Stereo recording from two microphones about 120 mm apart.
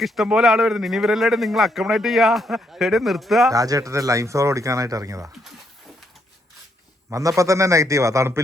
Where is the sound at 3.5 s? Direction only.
30° right (ahead or behind).